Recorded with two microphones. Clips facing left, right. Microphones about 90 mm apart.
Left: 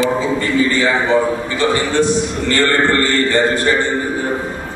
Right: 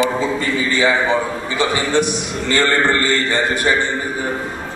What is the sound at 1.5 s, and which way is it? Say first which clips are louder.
A man's voice: left 1 dB; 15° right (ahead or behind).